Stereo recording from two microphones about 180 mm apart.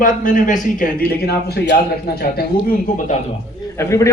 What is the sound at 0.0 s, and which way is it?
A man's voice, 50° left (ahead or behind).